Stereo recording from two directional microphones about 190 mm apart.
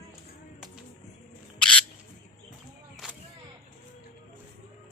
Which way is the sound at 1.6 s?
5° left (ahead or behind).